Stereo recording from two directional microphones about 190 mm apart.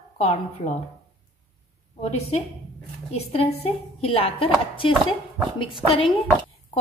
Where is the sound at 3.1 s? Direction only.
30° left (ahead or behind).